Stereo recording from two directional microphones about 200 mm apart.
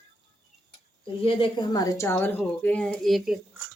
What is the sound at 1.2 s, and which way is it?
A woman's voice, 25° left (ahead or behind).